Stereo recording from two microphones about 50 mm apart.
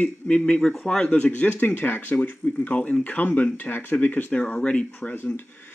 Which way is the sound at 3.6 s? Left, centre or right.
Left.